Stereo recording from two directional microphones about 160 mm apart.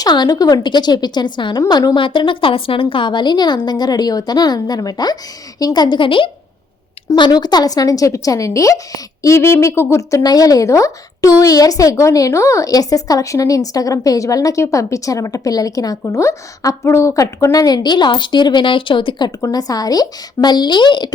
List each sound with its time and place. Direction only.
0.0 s a woman's voice: 25° left (ahead or behind)